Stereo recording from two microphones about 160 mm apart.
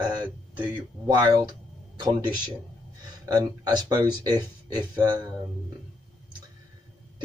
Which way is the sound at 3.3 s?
25° right (ahead or behind).